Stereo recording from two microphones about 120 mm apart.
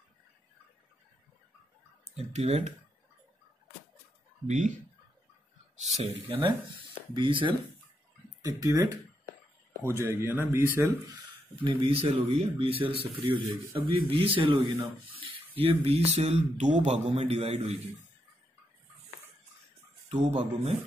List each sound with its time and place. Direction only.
2.1 s speech: 60° right (ahead or behind)
4.5 s speech: 90° right
5.8 s speech: 65° right (ahead or behind)
7.2 s speech: 45° right (ahead or behind)
8.4 s speech: 30° right (ahead or behind)
9.8 s speech: 20° right (ahead or behind)
11.6 s speech: 55° right (ahead or behind)
20.1 s speech: 70° right (ahead or behind)